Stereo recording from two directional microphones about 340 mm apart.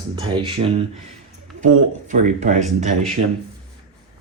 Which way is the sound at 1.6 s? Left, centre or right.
Right.